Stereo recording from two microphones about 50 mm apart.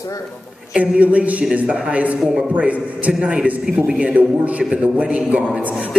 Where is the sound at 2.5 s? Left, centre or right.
Right.